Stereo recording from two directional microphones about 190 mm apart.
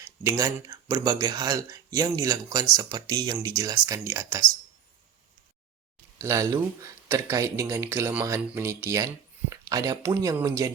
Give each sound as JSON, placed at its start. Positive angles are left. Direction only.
{"t": 0.0, "sound": "speech", "side_deg": -15}
{"t": 6.1, "sound": "speech", "side_deg": -15}